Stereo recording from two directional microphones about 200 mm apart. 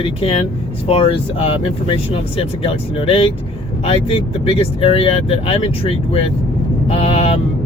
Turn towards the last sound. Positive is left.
turn(degrees=30)  # may be behind; listen again after turning